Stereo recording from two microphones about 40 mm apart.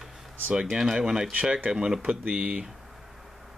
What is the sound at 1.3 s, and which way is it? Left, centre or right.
Speech, right.